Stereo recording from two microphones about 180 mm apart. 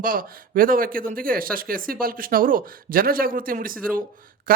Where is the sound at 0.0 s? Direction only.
50° right (ahead or behind).